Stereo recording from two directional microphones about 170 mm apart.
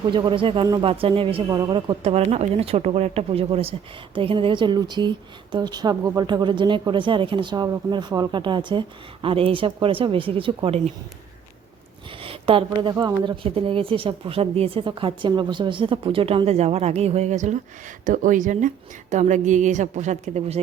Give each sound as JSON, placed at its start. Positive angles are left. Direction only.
{"t": 0.1, "sound": "speech", "side_deg": -30}
{"t": 2.0, "sound": "speech", "side_deg": -40}
{"t": 12.2, "sound": "a sound", "side_deg": -30}
{"t": 12.9, "sound": "a woman's voice", "side_deg": -20}